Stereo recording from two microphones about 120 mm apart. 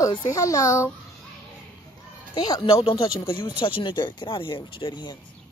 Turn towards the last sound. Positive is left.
turn(degrees=40)  # may be behind; listen again after turning